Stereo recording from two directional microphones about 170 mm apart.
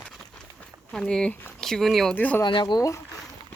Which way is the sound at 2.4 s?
25° left (ahead or behind).